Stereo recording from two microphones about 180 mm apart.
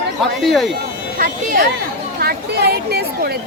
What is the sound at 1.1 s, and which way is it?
Speech, 50° right (ahead or behind).